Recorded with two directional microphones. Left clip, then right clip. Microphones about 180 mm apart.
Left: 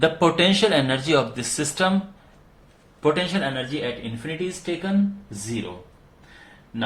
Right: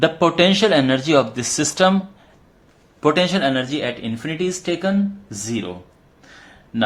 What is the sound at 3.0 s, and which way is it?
Speech, 35° right (ahead or behind).